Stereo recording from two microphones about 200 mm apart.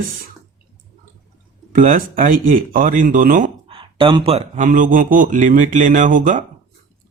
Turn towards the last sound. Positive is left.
turn(degrees=-40)  # may be behind; listen again after turning